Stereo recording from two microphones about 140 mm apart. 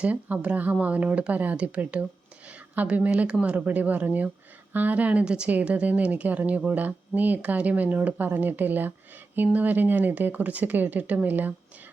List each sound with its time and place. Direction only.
0.0 s a woman's voice: 10° right (ahead or behind)